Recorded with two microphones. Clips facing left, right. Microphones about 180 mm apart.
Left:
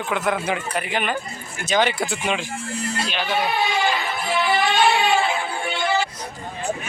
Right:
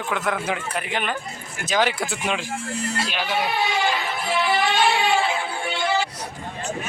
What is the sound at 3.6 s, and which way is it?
Music, 50° left (ahead or behind).